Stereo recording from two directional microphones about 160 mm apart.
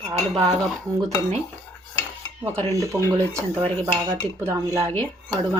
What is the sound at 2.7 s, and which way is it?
Speech, 20° right (ahead or behind).